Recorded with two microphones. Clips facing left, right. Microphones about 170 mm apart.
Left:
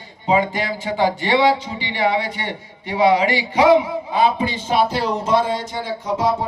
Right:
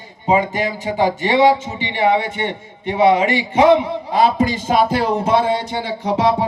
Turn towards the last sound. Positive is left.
turn(degrees=-70)  # may be behind; listen again after turning